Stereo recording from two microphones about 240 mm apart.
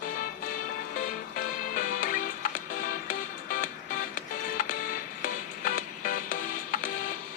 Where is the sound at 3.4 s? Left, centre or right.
Left.